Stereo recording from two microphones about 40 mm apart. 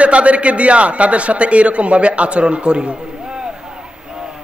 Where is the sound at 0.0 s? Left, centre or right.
Right.